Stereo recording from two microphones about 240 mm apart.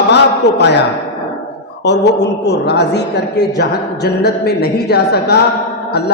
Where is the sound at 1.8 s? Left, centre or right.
Left.